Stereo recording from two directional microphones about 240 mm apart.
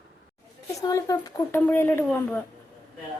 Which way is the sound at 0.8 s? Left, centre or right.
Centre.